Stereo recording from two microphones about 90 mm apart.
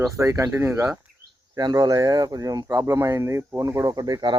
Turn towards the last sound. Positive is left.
turn(degrees=-50)  # may be behind; listen again after turning